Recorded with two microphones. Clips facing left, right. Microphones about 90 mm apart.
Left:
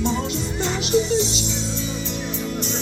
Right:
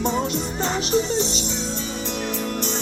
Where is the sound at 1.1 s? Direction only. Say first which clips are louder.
Left 2 dB; 50° right (ahead or behind).